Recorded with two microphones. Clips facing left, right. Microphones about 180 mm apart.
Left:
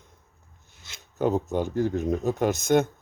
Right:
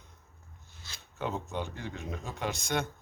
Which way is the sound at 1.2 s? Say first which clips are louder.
Left 10 dB; 40° left (ahead or behind).